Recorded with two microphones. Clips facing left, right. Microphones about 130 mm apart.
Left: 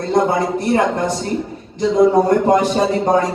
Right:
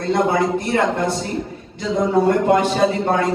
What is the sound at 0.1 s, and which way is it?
Speech, 35° left (ahead or behind).